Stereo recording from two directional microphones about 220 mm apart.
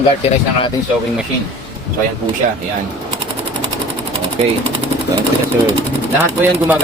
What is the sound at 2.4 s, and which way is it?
Speech, 35° right (ahead or behind).